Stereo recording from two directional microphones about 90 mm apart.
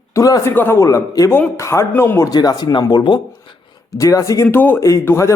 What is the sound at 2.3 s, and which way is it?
Speech, 50° left (ahead or behind).